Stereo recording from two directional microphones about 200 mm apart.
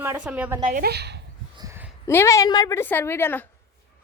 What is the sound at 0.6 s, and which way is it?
Speech, 45° right (ahead or behind).